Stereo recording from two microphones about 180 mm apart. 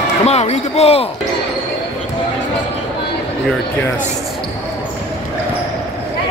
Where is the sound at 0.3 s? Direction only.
35° left (ahead or behind).